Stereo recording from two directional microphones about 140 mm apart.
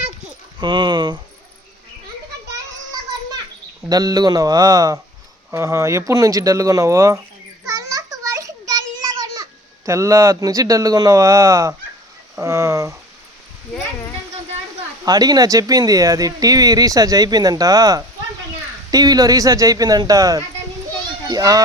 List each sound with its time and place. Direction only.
0.6 s speech: 35° right (ahead or behind)
3.8 s speech: 25° right (ahead or behind)
7.6 s a sound: 25° right (ahead or behind)
12.4 s speech: 20° right (ahead or behind)
15.0 s a child's voice: 25° right (ahead or behind)